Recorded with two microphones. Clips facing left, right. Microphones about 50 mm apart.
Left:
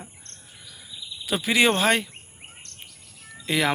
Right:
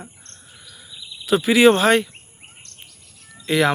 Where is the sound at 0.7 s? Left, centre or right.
Centre.